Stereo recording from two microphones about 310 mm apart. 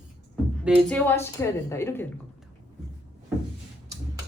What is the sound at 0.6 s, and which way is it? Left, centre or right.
A woman's voice, centre.